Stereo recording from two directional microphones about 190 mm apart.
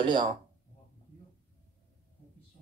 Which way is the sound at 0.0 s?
25° right (ahead or behind).